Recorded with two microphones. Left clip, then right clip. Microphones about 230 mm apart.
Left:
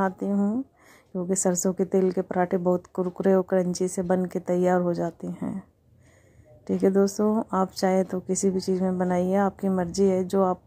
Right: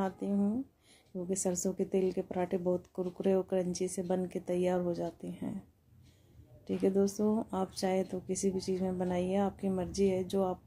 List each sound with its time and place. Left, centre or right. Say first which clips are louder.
0.0 s a woman's voice: left 8 dB; left
6.6 s a woman's voice: left 8 dB; left